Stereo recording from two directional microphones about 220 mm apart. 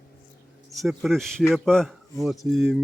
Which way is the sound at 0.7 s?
Centre (ahead or behind).